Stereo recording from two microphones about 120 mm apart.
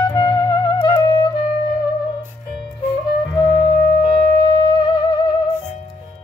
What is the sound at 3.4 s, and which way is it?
Music, 35° left (ahead or behind).